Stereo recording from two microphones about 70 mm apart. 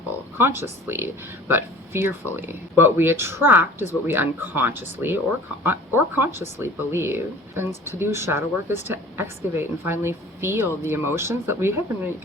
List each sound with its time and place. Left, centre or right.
0.3 s speech: right